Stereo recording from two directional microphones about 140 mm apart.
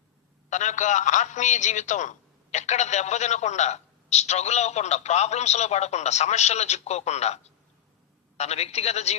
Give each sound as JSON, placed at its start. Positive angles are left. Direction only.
{"t": 0.5, "sound": "a man's voice", "side_deg": 60}